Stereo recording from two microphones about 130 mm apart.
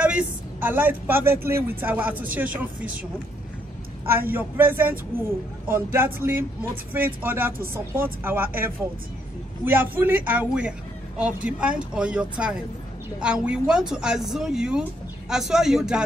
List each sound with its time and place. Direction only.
0.0 s speech: 10° right (ahead or behind)
4.1 s speech: 15° right (ahead or behind)